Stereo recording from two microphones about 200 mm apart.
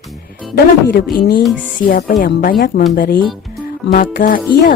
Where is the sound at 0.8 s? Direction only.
45° left (ahead or behind).